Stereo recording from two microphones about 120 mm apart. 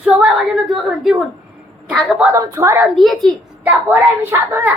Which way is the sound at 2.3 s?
25° right (ahead or behind).